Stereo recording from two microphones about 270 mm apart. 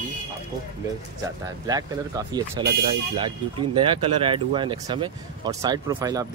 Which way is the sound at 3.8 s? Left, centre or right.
Centre.